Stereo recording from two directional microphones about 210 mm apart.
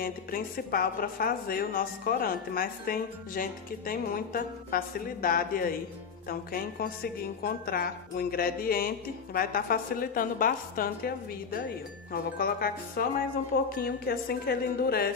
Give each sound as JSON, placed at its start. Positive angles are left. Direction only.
{"t": 0.0, "sound": "speech", "side_deg": 45}